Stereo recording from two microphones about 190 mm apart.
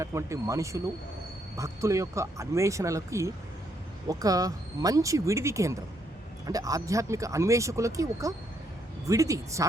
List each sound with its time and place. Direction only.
0.0 s speech: 15° right (ahead or behind)